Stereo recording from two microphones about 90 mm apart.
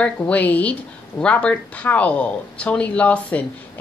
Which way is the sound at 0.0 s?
15° left (ahead or behind).